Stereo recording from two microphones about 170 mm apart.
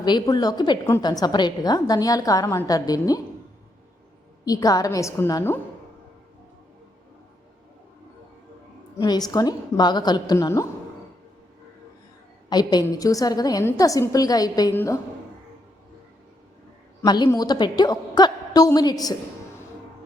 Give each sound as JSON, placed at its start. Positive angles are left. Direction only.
{"t": 0.0, "sound": "a woman's voice", "side_deg": 25}
{"t": 4.4, "sound": "a woman's voice", "side_deg": 20}
{"t": 9.0, "sound": "a woman's voice", "side_deg": 20}
{"t": 12.5, "sound": "a woman's voice", "side_deg": 25}
{"t": 17.2, "sound": "a woman's voice", "side_deg": 25}